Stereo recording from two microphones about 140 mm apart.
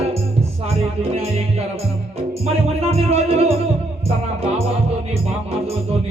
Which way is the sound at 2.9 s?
45° right (ahead or behind).